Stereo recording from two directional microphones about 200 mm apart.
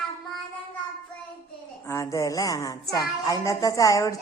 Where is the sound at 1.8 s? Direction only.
15° left (ahead or behind).